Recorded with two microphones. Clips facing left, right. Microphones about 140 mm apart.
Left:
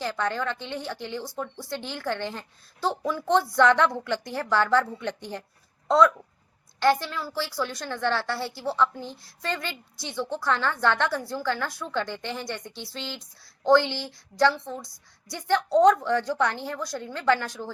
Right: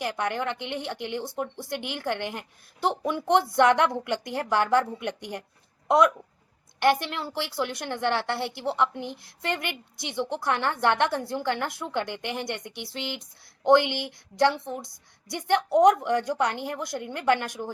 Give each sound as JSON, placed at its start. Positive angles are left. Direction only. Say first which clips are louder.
{"t": 0.0, "sound": "a woman's voice", "louder": "even", "side_deg": -15}